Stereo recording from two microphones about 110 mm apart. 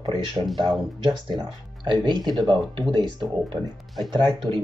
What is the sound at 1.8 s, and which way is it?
Speech, 45° right (ahead or behind).